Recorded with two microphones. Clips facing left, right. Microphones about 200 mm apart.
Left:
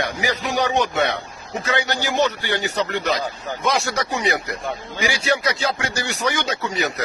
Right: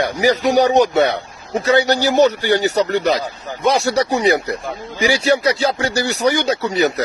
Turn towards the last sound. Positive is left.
turn(degrees=-35)  # may be behind; listen again after turning